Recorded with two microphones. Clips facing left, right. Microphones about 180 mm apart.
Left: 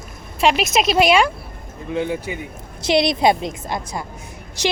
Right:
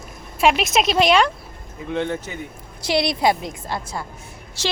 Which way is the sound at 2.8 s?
20° left (ahead or behind).